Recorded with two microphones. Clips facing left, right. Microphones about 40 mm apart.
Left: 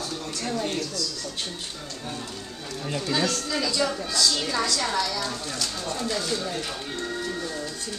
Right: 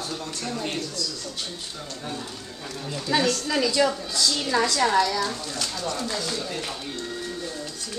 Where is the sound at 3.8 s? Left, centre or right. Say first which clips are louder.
Right 2 dB; centre.